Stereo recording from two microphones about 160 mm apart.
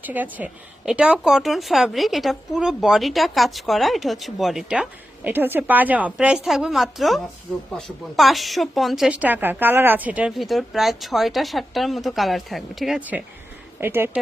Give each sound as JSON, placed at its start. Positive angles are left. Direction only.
{"t": 0.0, "sound": "a woman's voice", "side_deg": -10}